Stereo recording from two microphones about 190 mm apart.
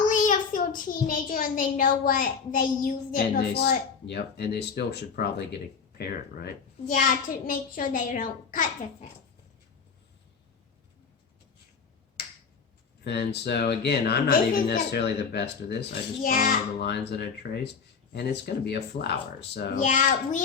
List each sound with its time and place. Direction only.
0.1 s a child's voice: 40° left (ahead or behind); by 6.5 s 60° left (ahead or behind)
6.8 s a child's voice: 45° left (ahead or behind)
13.1 s speech: 60° left (ahead or behind)
16.2 s speech: 45° left (ahead or behind); by 19.6 s 65° left (ahead or behind)
19.8 s a child's voice: 40° left (ahead or behind)